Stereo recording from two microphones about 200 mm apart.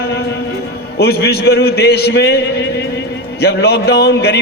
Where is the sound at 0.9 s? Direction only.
55° left (ahead or behind).